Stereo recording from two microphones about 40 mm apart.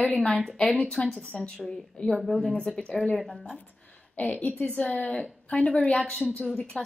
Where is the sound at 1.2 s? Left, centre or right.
Left.